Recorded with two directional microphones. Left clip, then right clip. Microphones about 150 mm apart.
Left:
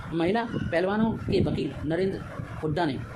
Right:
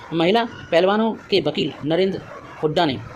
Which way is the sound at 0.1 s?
35° right (ahead or behind).